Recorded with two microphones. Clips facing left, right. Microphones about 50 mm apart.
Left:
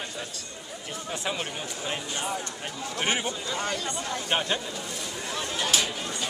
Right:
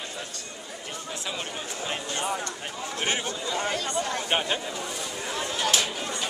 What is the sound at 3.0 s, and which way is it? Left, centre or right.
Speech, centre.